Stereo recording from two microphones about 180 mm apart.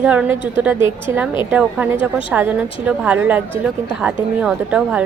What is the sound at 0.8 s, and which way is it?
Speech, 30° left (ahead or behind).